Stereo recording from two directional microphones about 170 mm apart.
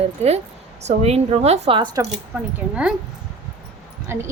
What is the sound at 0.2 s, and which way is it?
A woman's voice, 40° right (ahead or behind).